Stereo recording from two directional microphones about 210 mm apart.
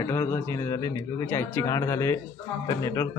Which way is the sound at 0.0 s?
15° left (ahead or behind).